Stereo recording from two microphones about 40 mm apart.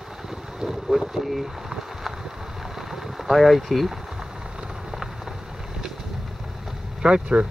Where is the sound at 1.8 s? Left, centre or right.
Centre.